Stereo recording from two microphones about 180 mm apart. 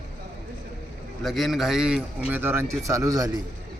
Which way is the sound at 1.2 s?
Centre (ahead or behind).